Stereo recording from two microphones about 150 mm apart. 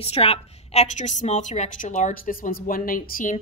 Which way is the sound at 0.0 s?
40° left (ahead or behind).